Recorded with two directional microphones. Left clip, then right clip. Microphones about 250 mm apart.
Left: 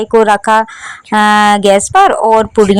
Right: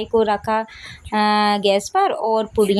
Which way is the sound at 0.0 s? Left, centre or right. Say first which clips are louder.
Left 10 dB; left.